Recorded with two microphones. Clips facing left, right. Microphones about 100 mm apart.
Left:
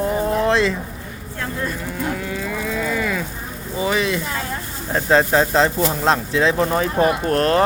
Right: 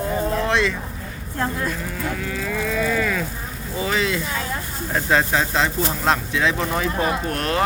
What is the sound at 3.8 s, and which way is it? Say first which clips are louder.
Speech: left 2 dB; 20° left (ahead or behind).